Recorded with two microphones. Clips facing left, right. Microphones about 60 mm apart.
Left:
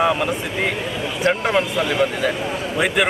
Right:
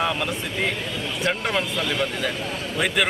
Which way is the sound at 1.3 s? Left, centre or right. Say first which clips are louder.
Left 6 dB; centre.